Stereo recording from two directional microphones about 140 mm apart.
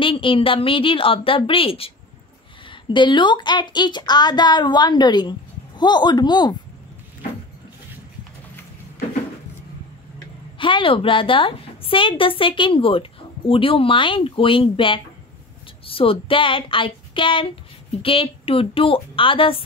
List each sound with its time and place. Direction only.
0.0 s a woman's voice: 40° left (ahead or behind)
10.6 s a woman's voice: 35° left (ahead or behind)